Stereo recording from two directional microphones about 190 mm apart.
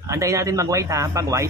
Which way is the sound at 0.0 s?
15° right (ahead or behind).